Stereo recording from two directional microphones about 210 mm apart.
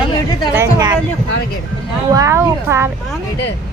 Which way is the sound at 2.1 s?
15° right (ahead or behind).